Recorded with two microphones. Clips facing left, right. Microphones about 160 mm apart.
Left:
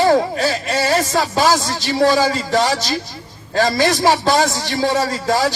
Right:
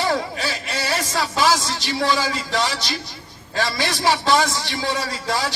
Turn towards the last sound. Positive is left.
turn(degrees=45)  # may be behind; listen again after turning